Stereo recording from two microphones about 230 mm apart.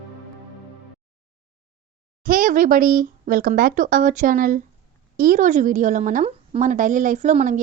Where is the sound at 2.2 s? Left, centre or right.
Right.